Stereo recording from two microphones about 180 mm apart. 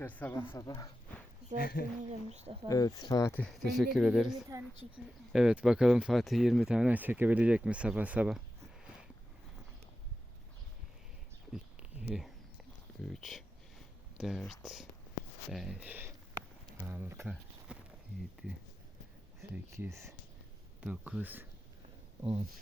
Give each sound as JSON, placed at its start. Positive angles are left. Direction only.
{"t": 0.0, "sound": "speech", "side_deg": 10}
{"t": 1.5, "sound": "speech", "side_deg": 55}
{"t": 2.0, "sound": "speech", "side_deg": -35}
{"t": 2.6, "sound": "speech", "side_deg": 20}
{"t": 3.5, "sound": "speech", "side_deg": 0}
{"t": 11.5, "sound": "a sound", "side_deg": -5}
{"t": 13.0, "sound": "speech", "side_deg": 0}
{"t": 19.4, "sound": "speech", "side_deg": -15}